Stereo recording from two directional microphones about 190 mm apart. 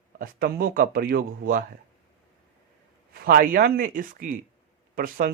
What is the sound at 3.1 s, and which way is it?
A man's voice, 50° right (ahead or behind).